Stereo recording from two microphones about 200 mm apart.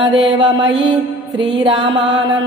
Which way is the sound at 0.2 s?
65° right (ahead or behind).